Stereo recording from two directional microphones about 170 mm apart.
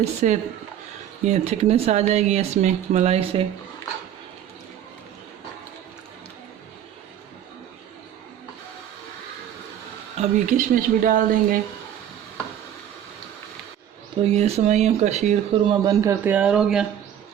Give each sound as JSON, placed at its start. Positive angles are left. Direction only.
{"t": 0.0, "sound": "speech", "side_deg": -40}
{"t": 10.2, "sound": "speech", "side_deg": -50}
{"t": 14.3, "sound": "speech", "side_deg": -40}
{"t": 15.6, "sound": "a man's voice", "side_deg": -25}